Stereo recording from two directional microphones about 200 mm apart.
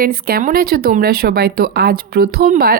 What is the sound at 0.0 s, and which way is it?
Speech, 50° right (ahead or behind).